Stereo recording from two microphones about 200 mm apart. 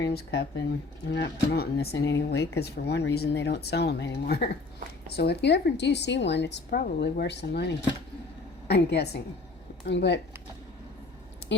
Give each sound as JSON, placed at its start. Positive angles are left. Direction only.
{"t": 0.0, "sound": "speech", "side_deg": 55}